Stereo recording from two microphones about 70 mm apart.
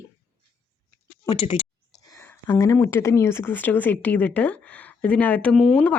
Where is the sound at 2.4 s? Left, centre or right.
Left.